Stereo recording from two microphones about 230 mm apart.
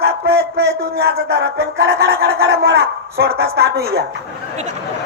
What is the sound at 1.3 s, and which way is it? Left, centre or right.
Speech, right.